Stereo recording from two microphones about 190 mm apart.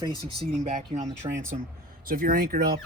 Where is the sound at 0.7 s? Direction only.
40° right (ahead or behind).